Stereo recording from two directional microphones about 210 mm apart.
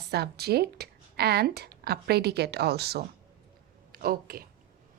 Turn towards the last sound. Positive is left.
turn(degrees=-45)  # may be behind; listen again after turning